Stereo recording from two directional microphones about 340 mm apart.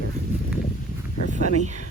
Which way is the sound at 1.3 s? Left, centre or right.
Right.